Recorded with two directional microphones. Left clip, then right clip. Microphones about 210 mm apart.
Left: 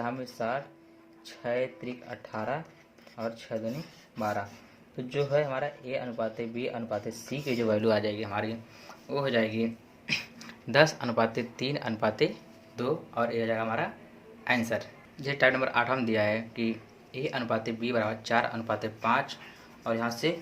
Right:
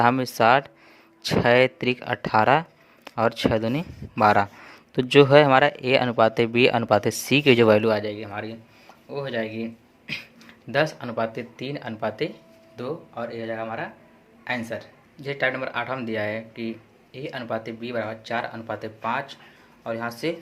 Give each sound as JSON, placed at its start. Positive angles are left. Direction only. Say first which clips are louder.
{"t": 0.0, "sound": "speech", "louder": "right 14 dB", "side_deg": -45}
{"t": 7.8, "sound": "speech", "louder": "right 4 dB", "side_deg": -25}